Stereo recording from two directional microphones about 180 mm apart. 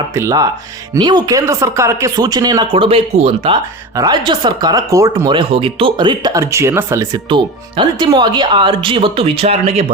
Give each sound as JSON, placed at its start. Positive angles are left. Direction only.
{"t": 0.1, "sound": "speech", "side_deg": -15}